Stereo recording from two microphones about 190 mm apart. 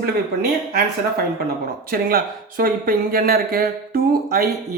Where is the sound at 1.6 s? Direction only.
50° right (ahead or behind).